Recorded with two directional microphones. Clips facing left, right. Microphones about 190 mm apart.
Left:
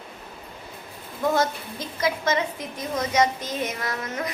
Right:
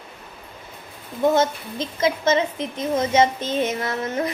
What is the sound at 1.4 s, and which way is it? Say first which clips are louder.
A woman's voice: right 4 dB; 25° right (ahead or behind).